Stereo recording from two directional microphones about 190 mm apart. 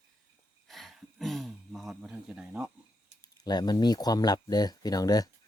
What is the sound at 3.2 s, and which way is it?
Speech, 20° left (ahead or behind).